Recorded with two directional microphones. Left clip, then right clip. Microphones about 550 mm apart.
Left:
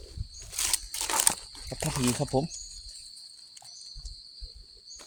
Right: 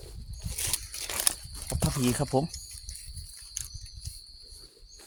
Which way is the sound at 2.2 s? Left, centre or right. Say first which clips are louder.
Right 1 dB; right.